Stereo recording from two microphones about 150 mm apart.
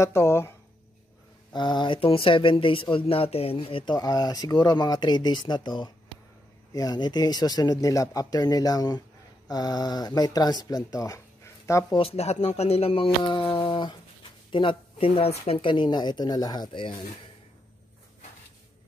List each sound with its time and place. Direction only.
0.0 s speech: 20° left (ahead or behind)
1.5 s speech: 30° left (ahead or behind)
12.0 s speech: 45° left (ahead or behind)